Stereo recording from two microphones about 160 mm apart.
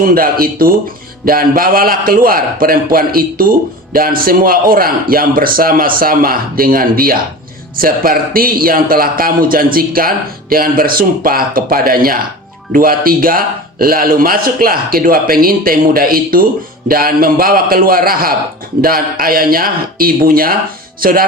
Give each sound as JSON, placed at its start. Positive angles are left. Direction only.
{"t": 0.0, "sound": "speech", "side_deg": -65}